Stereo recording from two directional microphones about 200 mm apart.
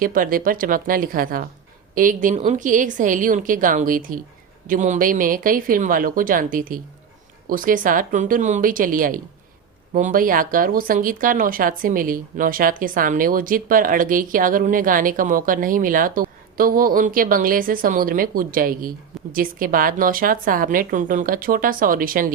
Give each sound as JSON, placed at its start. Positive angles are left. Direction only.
{"t": 0.0, "sound": "a woman's voice", "side_deg": -45}